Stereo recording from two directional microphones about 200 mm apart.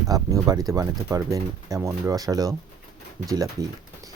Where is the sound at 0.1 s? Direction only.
15° right (ahead or behind).